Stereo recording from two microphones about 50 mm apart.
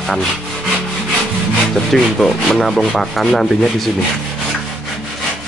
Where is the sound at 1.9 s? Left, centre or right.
Centre.